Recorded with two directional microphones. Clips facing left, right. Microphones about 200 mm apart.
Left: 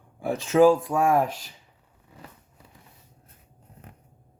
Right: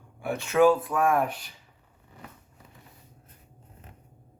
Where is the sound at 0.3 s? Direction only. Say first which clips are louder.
Left 3 dB; 30° left (ahead or behind).